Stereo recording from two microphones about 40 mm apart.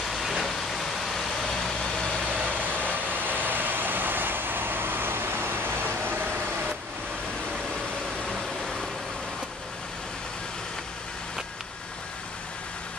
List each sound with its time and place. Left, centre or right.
0.1 s vehicle: centre
2.4 s vehicle: right
8.3 s vehicle: centre